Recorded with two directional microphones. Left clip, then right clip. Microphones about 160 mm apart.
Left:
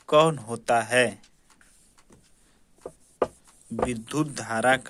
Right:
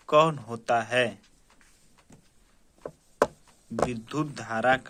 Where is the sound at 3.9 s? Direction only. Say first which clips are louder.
Left 3 dB; 35° left (ahead or behind).